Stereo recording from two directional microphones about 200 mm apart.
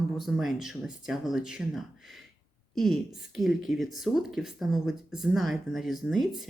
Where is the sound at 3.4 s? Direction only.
Centre (ahead or behind).